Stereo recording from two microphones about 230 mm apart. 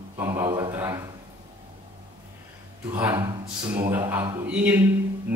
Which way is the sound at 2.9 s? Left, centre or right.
Centre.